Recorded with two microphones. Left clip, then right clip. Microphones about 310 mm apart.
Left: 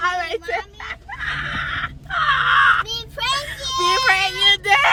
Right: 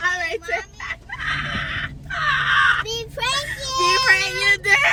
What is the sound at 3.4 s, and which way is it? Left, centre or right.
Child singing, centre.